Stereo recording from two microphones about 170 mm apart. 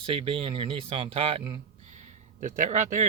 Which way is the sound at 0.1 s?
30° right (ahead or behind).